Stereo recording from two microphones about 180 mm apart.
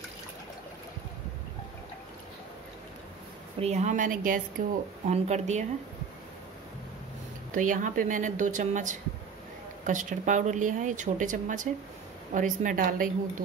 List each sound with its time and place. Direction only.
3.5 s a woman's voice: 40° right (ahead or behind)
7.5 s speech: 45° right (ahead or behind)